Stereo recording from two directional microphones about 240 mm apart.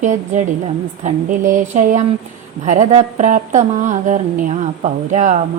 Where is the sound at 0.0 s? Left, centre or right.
Right.